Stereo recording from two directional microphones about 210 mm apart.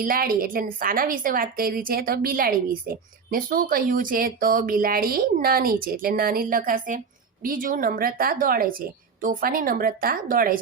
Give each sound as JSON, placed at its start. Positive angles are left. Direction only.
{"t": 0.0, "sound": "a woman's voice", "side_deg": -40}